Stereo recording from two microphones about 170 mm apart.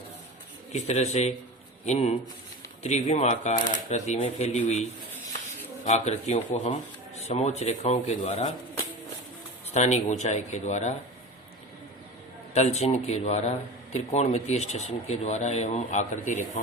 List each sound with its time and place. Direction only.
0.7 s speech: 40° left (ahead or behind)
9.7 s speech: 40° left (ahead or behind)
12.5 s speech: 40° left (ahead or behind)